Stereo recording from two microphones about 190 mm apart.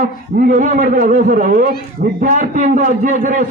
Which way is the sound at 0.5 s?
45° right (ahead or behind).